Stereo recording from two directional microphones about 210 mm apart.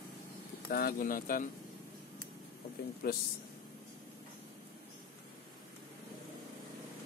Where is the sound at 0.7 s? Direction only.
45° left (ahead or behind).